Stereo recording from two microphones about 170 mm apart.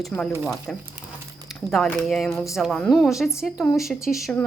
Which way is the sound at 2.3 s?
20° left (ahead or behind).